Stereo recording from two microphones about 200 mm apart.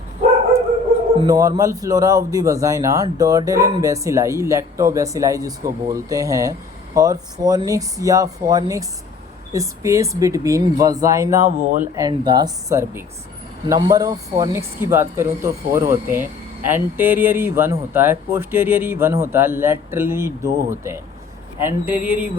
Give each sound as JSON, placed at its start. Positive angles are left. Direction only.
{"t": 1.2, "sound": "speech", "side_deg": -15}
{"t": 11.4, "sound": "speech", "side_deg": -40}
{"t": 11.9, "sound": "speech", "side_deg": -20}